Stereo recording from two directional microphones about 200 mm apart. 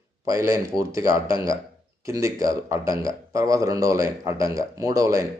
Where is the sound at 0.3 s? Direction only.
15° right (ahead or behind).